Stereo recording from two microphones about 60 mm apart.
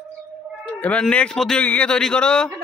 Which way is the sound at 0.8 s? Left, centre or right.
Left.